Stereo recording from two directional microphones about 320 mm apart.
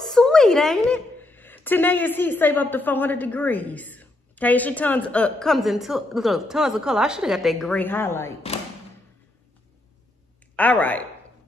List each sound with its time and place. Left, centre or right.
0.0 s a woman's voice: centre
10.5 s speech: centre